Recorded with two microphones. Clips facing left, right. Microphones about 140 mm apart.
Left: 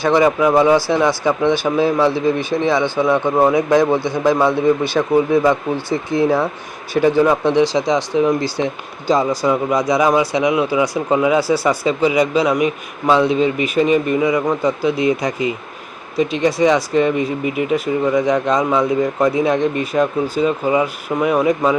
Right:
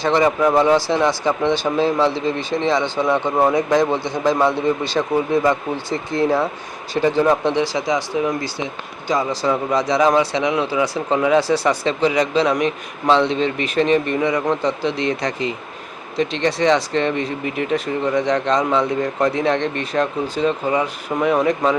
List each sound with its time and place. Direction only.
0.1 s speech: 10° left (ahead or behind)
0.8 s speech: 20° right (ahead or behind)
1.6 s speech: 10° left (ahead or behind)
2.7 s a man's voice: 20° right (ahead or behind)
3.1 s speech: 5° left (ahead or behind)
4.0 s speech: 15° right (ahead or behind)
5.1 s speech: 10° left (ahead or behind)
7.5 s speech: 20° left (ahead or behind)